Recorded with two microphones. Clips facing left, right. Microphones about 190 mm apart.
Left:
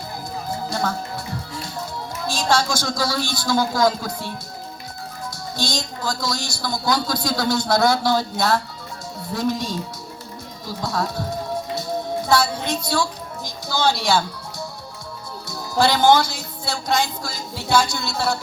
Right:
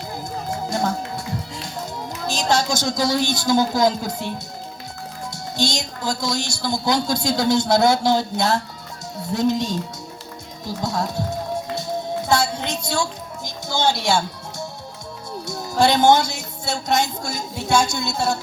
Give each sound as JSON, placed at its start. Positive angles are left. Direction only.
{"t": 2.2, "sound": "a woman's voice", "side_deg": -20}
{"t": 5.5, "sound": "a woman's voice", "side_deg": -25}
{"t": 11.8, "sound": "music", "side_deg": -25}
{"t": 15.4, "sound": "a woman's voice", "side_deg": -25}